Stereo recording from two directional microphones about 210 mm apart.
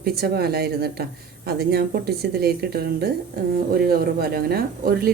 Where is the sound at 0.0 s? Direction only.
50° right (ahead or behind).